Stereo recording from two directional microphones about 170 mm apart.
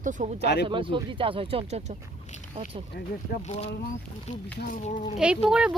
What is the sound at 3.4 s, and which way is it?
Speech, 40° left (ahead or behind).